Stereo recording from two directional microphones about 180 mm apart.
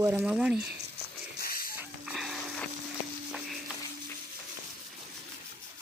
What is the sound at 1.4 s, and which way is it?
Hiss, 55° left (ahead or behind).